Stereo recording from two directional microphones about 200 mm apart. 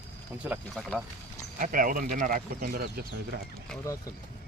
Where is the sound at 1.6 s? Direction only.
40° right (ahead or behind).